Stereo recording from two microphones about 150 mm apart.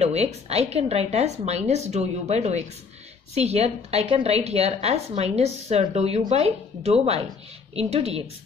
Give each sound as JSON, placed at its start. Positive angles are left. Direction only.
{"t": 0.0, "sound": "a woman's voice", "side_deg": -45}